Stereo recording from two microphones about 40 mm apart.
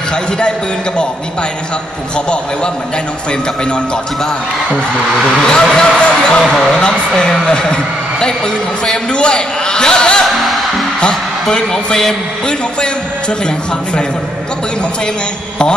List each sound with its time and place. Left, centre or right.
2.1 s a woman's voice: left
5.4 s a woman's voice: centre
6.4 s speech: centre
6.8 s a woman's voice: left
10.2 s music: centre
11.5 s a woman's voice: centre